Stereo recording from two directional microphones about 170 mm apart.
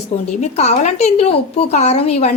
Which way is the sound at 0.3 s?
40° left (ahead or behind).